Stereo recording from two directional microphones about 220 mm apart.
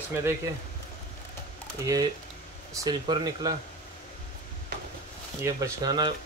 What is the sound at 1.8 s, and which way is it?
Speech, 15° right (ahead or behind).